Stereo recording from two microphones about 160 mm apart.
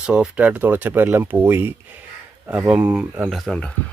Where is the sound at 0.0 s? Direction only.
5° right (ahead or behind).